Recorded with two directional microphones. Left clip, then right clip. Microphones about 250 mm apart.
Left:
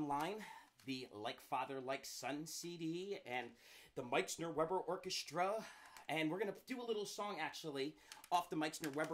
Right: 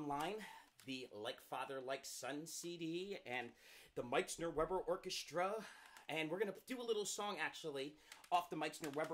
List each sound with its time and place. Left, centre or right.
0.1 s speech: centre
0.9 s speech: centre
1.2 s speech: left
2.8 s speech: centre
3.1 s speech: centre
5.0 s speech: centre
6.8 s speech: centre
7.3 s speech: centre
8.4 s speech: centre